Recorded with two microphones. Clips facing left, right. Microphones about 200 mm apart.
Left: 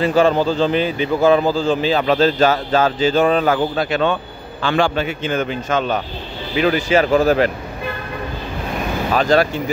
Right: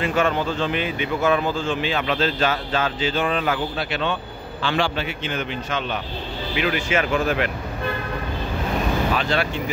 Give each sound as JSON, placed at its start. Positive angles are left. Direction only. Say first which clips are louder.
{"t": 0.0, "sound": "a man's voice", "louder": "left 7 dB", "side_deg": 35}
{"t": 9.1, "sound": "speech", "louder": "left 7 dB", "side_deg": 40}